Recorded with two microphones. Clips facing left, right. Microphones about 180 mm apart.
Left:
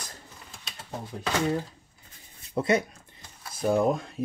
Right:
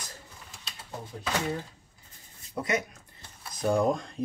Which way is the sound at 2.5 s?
30° left (ahead or behind).